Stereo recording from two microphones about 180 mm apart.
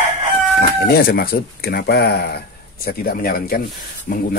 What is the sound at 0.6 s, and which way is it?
Speech, 55° left (ahead or behind).